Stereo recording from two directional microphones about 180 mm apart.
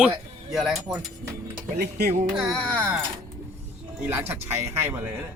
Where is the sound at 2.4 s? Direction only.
5° left (ahead or behind).